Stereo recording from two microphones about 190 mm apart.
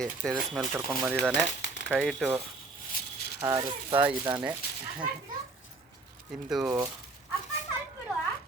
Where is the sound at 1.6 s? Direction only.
70° left (ahead or behind).